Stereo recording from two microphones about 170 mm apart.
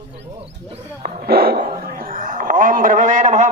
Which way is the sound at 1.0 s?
65° right (ahead or behind).